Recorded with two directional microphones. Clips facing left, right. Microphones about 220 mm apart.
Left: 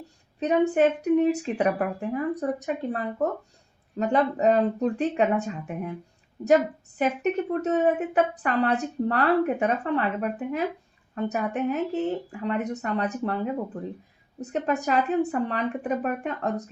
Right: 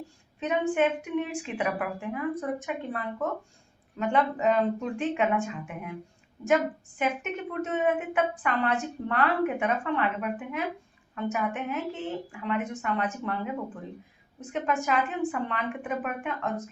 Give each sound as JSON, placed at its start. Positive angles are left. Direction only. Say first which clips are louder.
{"t": 0.7, "sound": "a woman's voice", "louder": "left 5 dB", "side_deg": 40}
{"t": 7.0, "sound": "a woman's voice", "louder": "left 6 dB", "side_deg": 40}